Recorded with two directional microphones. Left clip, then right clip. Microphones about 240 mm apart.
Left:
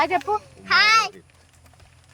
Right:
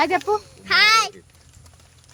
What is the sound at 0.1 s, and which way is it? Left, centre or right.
Speech, right.